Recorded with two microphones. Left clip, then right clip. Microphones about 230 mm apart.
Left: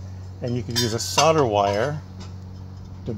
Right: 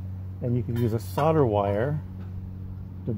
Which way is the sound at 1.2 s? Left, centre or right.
Centre.